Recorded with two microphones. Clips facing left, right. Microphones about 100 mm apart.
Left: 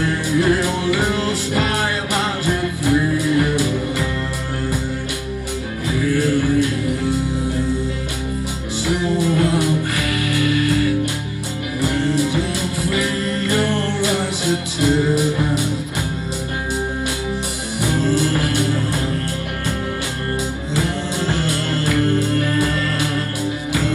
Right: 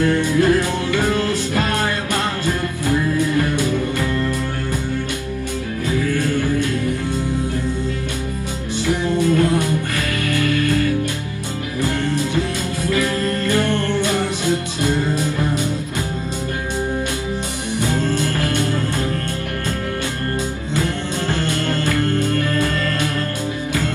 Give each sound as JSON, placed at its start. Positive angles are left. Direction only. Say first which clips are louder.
{"t": 0.0, "sound": "music", "louder": "right 2 dB", "side_deg": 20}
{"t": 5.9, "sound": "music", "louder": "left 2 dB", "side_deg": 20}
{"t": 9.2, "sound": "music", "louder": "right 3 dB", "side_deg": 20}
{"t": 17.7, "sound": "music", "louder": "left 2 dB", "side_deg": 20}
{"t": 21.4, "sound": "music", "louder": "right 1 dB", "side_deg": 20}